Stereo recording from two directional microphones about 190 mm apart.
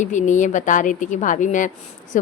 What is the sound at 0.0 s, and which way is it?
A woman's voice, 40° left (ahead or behind).